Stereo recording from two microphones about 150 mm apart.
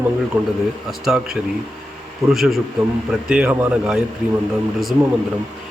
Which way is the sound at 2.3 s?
Centre (ahead or behind).